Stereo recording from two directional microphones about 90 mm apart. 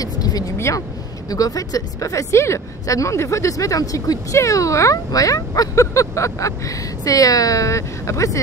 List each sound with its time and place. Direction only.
0.0 s vehicle: 45° left (ahead or behind)
0.6 s a woman's voice: 30° left (ahead or behind)